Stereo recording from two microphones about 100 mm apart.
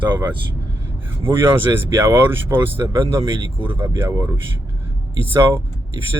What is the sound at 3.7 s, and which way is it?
Speech, 55° right (ahead or behind).